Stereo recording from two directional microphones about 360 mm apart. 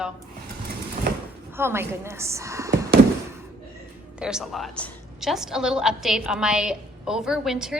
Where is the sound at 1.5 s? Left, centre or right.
Centre.